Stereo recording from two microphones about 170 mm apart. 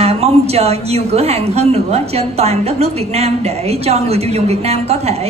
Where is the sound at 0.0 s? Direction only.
35° right (ahead or behind).